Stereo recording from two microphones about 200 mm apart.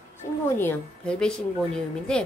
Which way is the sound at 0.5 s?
10° left (ahead or behind).